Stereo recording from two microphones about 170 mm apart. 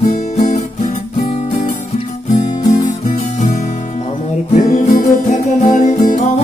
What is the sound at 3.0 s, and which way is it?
Music, 45° left (ahead or behind).